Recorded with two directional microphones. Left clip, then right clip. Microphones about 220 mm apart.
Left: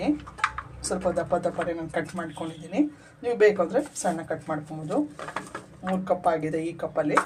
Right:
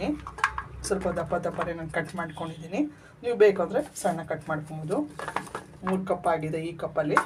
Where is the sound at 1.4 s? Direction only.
5° left (ahead or behind).